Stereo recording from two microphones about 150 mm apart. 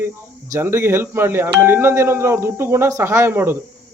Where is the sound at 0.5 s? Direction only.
15° right (ahead or behind).